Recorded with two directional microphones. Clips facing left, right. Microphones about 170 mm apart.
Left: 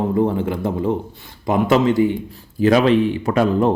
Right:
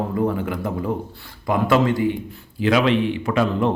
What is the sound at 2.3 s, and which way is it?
Speech, 40° left (ahead or behind).